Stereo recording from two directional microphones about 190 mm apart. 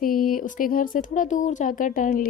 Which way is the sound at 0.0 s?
50° left (ahead or behind).